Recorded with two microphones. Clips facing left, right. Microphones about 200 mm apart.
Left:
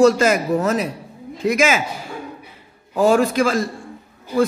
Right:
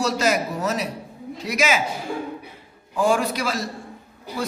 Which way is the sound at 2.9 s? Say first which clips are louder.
Left 5 dB; 40° left (ahead or behind).